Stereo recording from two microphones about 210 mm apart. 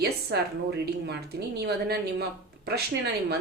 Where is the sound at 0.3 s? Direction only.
55° right (ahead or behind).